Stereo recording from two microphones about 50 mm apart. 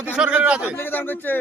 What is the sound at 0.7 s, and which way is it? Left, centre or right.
Speech, left.